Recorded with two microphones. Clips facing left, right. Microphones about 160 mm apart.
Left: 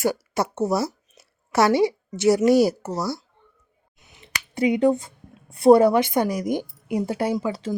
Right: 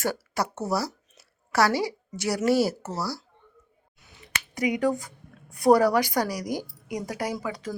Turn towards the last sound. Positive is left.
turn(degrees=30)  # may be behind; listen again after turning